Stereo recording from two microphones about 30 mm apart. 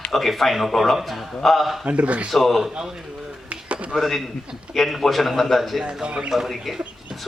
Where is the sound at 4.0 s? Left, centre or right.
Centre.